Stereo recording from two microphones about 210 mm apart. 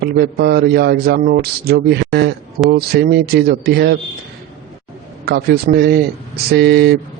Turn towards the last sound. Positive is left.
turn(degrees=-50)  # may be behind; listen again after turning